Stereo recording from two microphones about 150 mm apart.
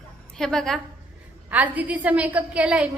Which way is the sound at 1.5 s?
10° right (ahead or behind).